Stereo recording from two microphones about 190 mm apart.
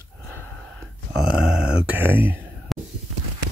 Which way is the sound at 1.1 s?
5° right (ahead or behind).